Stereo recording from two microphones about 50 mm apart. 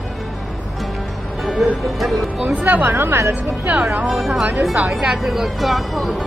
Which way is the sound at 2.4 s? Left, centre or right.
Right.